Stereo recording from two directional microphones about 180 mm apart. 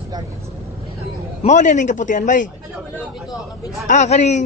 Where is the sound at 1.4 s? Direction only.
40° left (ahead or behind).